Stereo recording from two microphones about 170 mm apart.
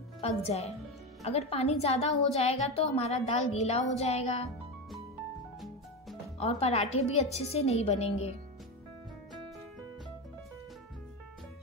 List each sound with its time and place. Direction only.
0.2 s a woman's voice: 40° left (ahead or behind)
5.6 s music: centre (ahead or behind)
6.4 s a woman's voice: 35° left (ahead or behind)